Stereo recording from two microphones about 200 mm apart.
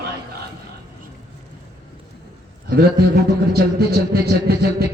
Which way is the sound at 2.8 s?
55° right (ahead or behind).